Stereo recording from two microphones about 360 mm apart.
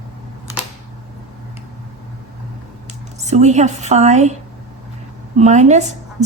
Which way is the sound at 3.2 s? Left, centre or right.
Centre.